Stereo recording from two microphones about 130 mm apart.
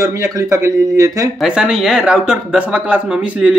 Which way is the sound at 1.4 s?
5° right (ahead or behind).